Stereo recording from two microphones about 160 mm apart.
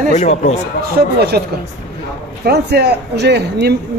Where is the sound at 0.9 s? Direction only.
80° right.